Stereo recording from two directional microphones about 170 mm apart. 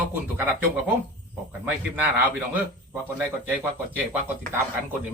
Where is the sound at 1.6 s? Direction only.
10° right (ahead or behind).